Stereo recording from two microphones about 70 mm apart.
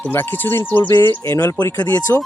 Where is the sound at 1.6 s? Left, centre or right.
Left.